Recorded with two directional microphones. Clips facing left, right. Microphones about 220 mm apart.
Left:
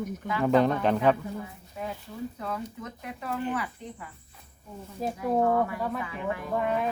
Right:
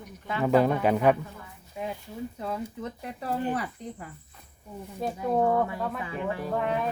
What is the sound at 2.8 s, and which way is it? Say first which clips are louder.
Speech: right 3 dB; 35° right (ahead or behind).